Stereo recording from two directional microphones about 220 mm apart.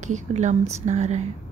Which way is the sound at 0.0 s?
35° right (ahead or behind).